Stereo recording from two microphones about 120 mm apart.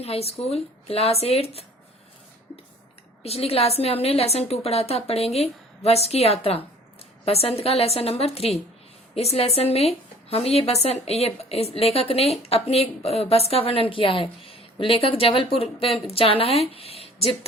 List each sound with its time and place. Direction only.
0.0 s a woman's voice: 55° left (ahead or behind)
3.2 s a woman's voice: 55° left (ahead or behind)